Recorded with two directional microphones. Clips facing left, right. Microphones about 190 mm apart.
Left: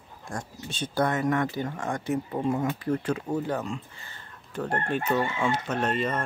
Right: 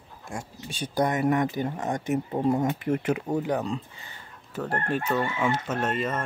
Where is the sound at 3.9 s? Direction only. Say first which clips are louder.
Right 1 dB; 15° right (ahead or behind).